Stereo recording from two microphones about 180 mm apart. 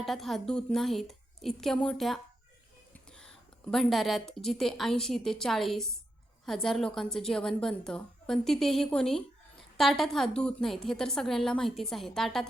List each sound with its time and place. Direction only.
0.0 s a woman's voice: centre (ahead or behind)